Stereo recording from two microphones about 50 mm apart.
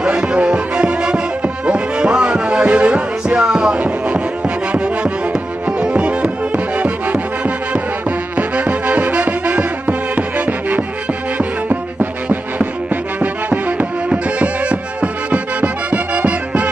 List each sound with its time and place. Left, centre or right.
0.0 s music: centre